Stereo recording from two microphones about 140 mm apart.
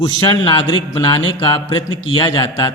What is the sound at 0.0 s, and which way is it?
A man's voice, 30° left (ahead or behind).